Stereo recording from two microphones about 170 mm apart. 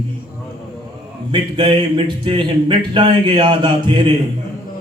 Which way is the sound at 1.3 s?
25° right (ahead or behind).